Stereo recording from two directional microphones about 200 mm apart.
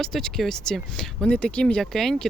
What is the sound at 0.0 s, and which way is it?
Speech, centre (ahead or behind).